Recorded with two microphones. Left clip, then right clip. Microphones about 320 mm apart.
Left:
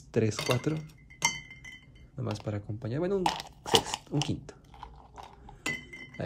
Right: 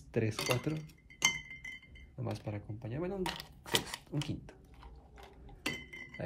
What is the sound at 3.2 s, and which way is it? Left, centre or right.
Speech, left.